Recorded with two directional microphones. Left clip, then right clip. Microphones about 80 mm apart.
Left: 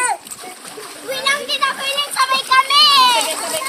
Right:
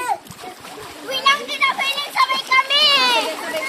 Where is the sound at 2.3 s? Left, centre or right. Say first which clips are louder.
Left 7 dB; left.